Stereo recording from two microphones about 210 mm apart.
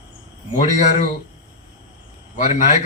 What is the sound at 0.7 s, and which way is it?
Speech, 35° left (ahead or behind).